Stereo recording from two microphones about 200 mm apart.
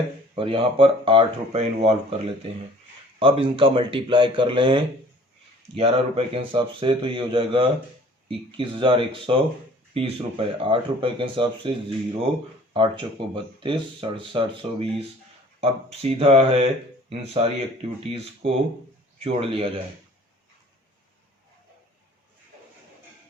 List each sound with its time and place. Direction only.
0.3 s speech: 25° right (ahead or behind)
12.7 s speech: 25° right (ahead or behind)